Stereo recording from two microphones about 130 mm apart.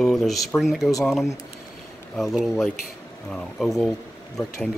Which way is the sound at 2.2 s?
Centre (ahead or behind).